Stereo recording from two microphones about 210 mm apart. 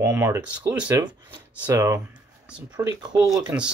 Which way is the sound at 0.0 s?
10° right (ahead or behind).